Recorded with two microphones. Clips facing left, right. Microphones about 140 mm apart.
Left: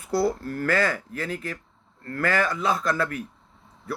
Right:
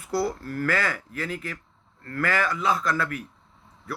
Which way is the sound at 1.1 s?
45° left (ahead or behind).